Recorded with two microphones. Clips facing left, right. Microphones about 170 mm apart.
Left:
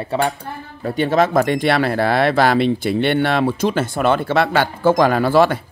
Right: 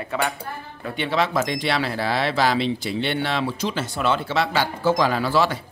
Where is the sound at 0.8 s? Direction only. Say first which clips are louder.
Left 7 dB; 45° left (ahead or behind).